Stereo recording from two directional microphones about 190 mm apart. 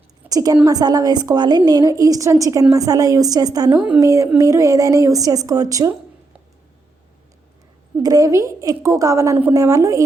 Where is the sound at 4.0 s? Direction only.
15° right (ahead or behind).